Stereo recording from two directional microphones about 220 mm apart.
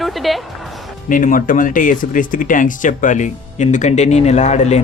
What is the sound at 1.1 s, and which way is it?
Speech, 35° left (ahead or behind).